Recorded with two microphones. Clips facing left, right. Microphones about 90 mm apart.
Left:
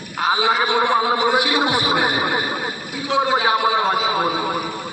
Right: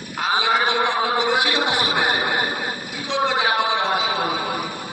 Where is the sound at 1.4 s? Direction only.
15° left (ahead or behind).